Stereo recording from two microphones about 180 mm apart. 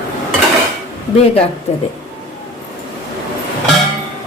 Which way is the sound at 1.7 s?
35° left (ahead or behind).